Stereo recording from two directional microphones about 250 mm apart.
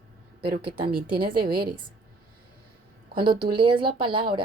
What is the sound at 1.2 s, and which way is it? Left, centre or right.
Speech, right.